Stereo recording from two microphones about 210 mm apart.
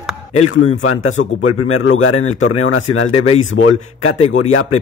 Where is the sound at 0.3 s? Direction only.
90° left.